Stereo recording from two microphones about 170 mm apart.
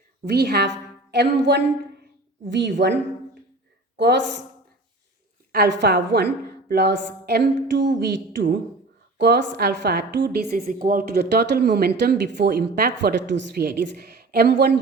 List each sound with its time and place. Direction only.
0.3 s a woman's voice: 75° right (ahead or behind); by 4.2 s 90° right
5.5 s a woman's voice: 80° right